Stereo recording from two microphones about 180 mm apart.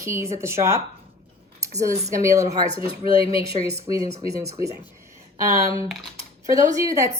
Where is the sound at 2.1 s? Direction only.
15° right (ahead or behind).